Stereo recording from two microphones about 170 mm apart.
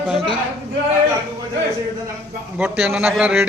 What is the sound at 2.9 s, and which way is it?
Speech, 5° right (ahead or behind).